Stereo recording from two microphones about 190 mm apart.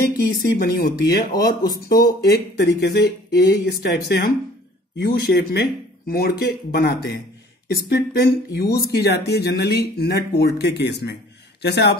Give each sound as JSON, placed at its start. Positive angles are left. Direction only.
{"t": 0.4, "sound": "speech", "side_deg": 55}